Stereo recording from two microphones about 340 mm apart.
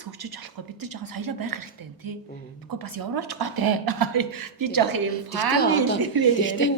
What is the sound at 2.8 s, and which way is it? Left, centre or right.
Speech, right.